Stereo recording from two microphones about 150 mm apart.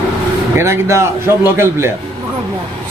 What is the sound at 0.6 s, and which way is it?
A man's voice, 15° right (ahead or behind).